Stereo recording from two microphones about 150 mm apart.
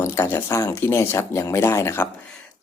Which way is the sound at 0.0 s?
15° left (ahead or behind).